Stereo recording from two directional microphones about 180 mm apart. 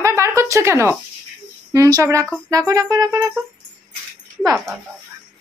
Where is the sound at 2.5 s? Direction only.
20° right (ahead or behind).